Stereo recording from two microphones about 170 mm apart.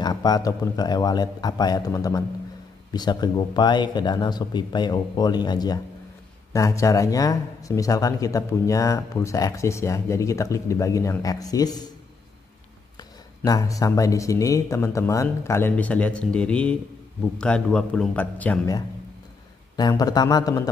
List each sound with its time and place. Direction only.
0.0 s speech: 25° left (ahead or behind)
13.4 s a man's voice: 20° left (ahead or behind)
19.8 s speech: 25° left (ahead or behind)